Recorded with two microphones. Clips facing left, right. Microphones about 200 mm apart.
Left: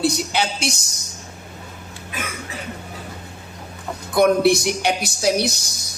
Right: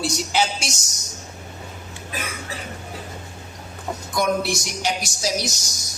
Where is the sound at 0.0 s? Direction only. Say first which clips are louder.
Left 2 dB; 60° left (ahead or behind).